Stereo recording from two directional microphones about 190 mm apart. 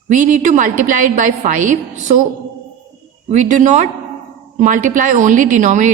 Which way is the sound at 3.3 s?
40° right (ahead or behind).